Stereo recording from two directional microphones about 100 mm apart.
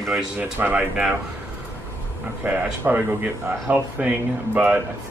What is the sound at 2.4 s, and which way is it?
Speech, 15° right (ahead or behind).